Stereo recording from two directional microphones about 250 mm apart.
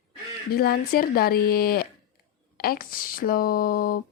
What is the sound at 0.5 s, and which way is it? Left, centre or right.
A woman's voice, left.